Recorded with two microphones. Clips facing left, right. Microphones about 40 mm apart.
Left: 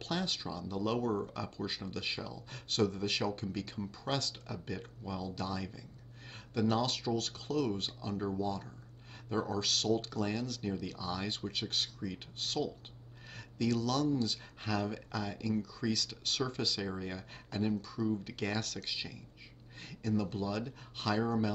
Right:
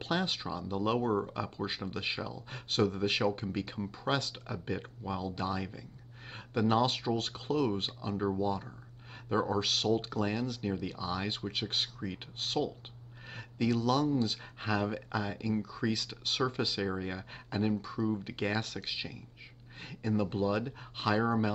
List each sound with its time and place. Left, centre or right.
0.0 s speech: right